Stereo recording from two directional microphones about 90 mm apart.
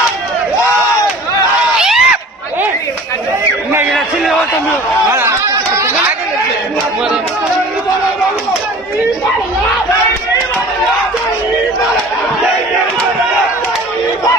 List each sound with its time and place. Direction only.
1.8 s screaming: 5° right (ahead or behind)
3.9 s a sound: centre (ahead or behind)
5.1 s chatter: 30° right (ahead or behind)